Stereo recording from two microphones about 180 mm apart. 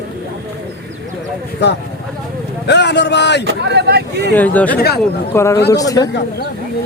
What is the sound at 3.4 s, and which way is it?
Speech, 70° right (ahead or behind).